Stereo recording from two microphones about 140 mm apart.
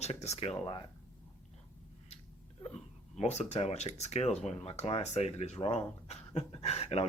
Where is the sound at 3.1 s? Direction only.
55° left (ahead or behind).